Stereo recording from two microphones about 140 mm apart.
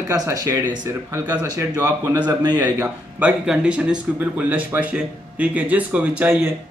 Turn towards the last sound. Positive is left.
turn(degrees=-10)  # may be behind; listen again after turning